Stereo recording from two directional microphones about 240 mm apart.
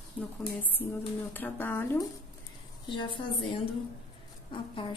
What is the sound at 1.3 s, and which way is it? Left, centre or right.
Speech, centre.